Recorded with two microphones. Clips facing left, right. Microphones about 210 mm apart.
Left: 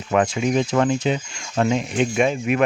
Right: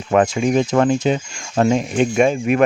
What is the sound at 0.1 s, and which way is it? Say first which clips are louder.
Speech: right 4 dB; 45° right (ahead or behind).